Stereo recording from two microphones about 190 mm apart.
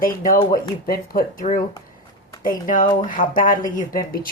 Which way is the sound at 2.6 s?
45° left (ahead or behind).